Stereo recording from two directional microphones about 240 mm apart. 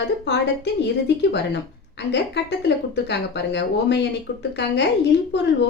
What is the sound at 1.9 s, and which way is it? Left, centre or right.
A woman's voice, left.